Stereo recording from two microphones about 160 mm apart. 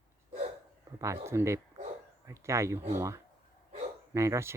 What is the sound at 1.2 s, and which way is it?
Speech, 15° right (ahead or behind).